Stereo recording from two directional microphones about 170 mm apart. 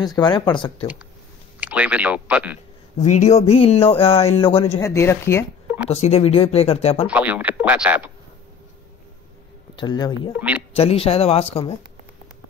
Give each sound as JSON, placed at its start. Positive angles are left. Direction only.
{"t": 0.0, "sound": "speech", "side_deg": 25}
{"t": 1.6, "sound": "speech", "side_deg": -10}
{"t": 3.0, "sound": "speech", "side_deg": 45}
{"t": 4.7, "sound": "speech", "side_deg": 15}
{"t": 5.9, "sound": "speech", "side_deg": 40}
{"t": 7.1, "sound": "speech", "side_deg": -10}
{"t": 9.8, "sound": "speech", "side_deg": 25}
{"t": 10.3, "sound": "speech", "side_deg": -10}
{"t": 10.7, "sound": "speech", "side_deg": 35}